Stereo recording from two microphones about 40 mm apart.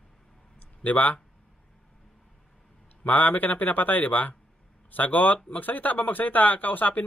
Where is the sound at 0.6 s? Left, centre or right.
Left.